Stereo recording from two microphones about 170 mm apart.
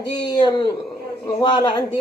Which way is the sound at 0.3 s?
25° left (ahead or behind).